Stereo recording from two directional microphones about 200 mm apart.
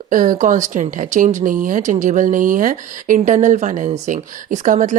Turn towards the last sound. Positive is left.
turn(degrees=-40)  # may be behind; listen again after turning